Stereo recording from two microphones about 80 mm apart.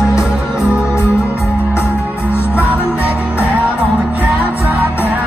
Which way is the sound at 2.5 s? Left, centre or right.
Centre.